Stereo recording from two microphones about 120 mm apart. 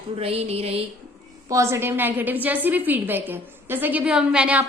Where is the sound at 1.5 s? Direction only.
25° right (ahead or behind).